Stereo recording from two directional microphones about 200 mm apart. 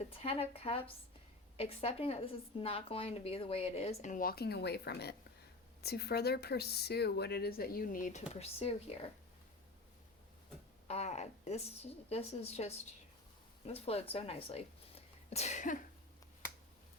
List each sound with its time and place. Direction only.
0.1 s a woman's voice: 30° left (ahead or behind)
8.3 s a woman's voice: 30° left (ahead or behind)
10.8 s a woman's voice: 30° left (ahead or behind)